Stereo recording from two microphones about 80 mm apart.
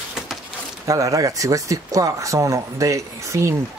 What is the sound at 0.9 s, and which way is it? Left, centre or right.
Speech, right.